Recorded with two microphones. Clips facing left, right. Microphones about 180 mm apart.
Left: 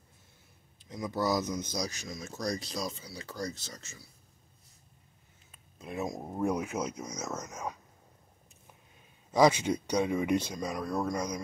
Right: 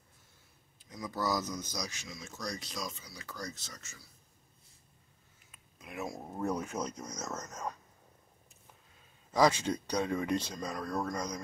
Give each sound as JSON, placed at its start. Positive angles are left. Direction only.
{"t": 0.8, "sound": "speech", "side_deg": 25}
{"t": 5.5, "sound": "a sound", "side_deg": 30}
{"t": 6.0, "sound": "speech", "side_deg": 15}
{"t": 9.3, "sound": "speech", "side_deg": 15}